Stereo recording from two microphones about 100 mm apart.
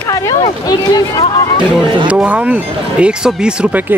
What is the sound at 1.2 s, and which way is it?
Speech, 60° left (ahead or behind).